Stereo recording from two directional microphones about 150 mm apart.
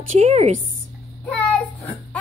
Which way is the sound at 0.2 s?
45° right (ahead or behind).